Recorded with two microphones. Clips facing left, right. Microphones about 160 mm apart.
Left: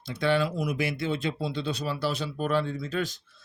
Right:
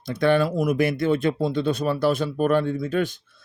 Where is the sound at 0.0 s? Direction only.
55° right (ahead or behind).